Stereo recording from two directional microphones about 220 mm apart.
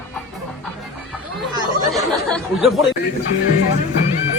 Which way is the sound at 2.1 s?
Centre (ahead or behind).